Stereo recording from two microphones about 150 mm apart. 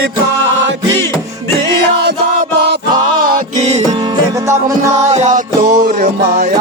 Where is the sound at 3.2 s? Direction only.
70° right (ahead or behind).